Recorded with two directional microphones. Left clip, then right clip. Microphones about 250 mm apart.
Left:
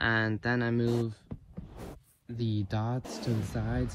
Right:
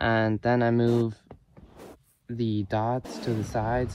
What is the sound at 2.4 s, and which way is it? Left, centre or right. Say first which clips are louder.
Speech: right 6 dB; centre.